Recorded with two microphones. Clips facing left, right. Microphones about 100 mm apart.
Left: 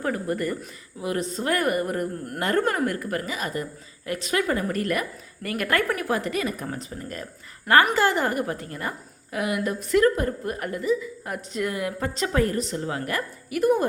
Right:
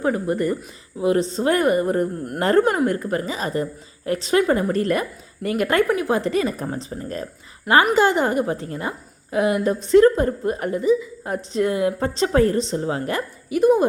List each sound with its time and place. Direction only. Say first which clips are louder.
0.0 s a woman's voice: right 5 dB; 20° right (ahead or behind)